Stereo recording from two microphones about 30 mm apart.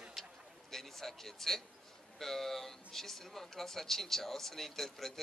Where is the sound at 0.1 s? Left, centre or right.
Centre.